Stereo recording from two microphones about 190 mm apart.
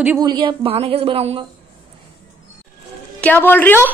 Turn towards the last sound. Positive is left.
turn(degrees=10)  # may be behind; listen again after turning